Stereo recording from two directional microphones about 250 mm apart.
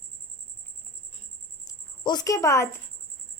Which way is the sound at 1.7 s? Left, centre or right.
Centre.